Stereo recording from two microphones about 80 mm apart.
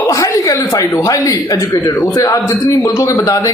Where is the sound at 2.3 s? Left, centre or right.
Left.